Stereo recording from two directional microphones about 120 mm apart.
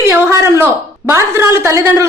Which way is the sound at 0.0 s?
20° right (ahead or behind).